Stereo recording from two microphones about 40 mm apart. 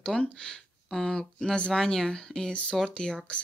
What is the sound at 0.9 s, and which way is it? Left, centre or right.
Speech, centre.